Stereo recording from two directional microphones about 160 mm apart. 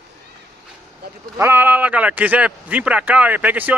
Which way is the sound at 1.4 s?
15° right (ahead or behind).